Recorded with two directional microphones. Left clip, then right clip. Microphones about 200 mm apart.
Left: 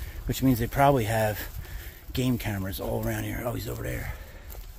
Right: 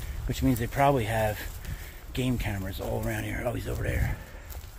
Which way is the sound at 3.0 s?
35° left (ahead or behind).